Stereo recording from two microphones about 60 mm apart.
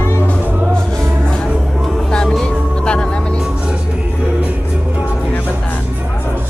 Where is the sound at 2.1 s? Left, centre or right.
Centre.